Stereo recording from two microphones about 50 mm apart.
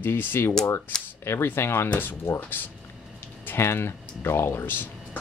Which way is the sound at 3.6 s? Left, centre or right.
Left.